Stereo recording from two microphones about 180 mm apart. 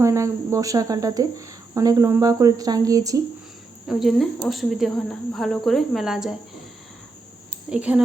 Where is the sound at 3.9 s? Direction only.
Centre (ahead or behind).